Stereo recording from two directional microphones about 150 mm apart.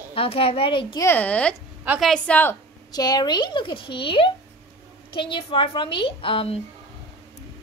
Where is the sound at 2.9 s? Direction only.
25° left (ahead or behind).